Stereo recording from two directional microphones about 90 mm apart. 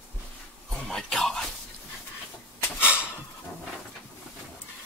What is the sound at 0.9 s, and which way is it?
Music, 5° left (ahead or behind).